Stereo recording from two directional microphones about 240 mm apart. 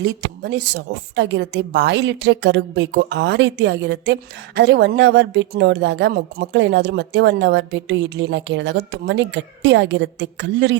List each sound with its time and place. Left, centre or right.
0.0 s a woman's voice: right